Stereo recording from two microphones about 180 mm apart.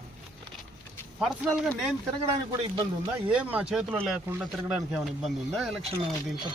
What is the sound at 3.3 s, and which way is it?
Speech, 5° right (ahead or behind).